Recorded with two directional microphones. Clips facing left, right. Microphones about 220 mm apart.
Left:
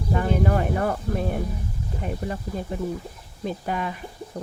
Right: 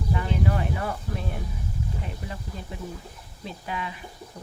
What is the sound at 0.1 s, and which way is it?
Speech, 45° left (ahead or behind).